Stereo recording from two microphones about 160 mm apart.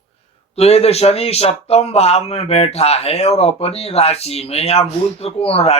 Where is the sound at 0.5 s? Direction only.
40° left (ahead or behind).